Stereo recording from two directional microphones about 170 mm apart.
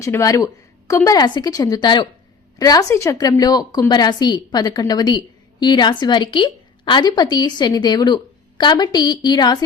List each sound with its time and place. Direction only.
0.0 s a woman's voice: 20° left (ahead or behind)